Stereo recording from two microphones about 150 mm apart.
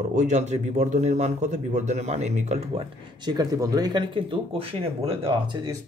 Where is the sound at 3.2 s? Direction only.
25° right (ahead or behind).